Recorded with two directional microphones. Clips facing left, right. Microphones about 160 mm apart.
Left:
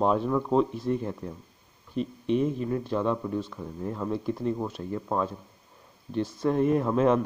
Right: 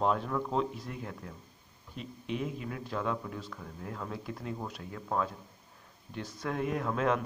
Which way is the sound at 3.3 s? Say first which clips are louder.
Left 10 dB; 20° left (ahead or behind).